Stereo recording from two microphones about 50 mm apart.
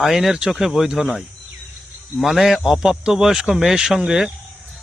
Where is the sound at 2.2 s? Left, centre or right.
Centre.